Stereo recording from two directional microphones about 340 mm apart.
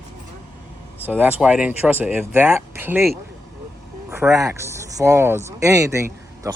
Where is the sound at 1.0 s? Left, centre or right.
Centre.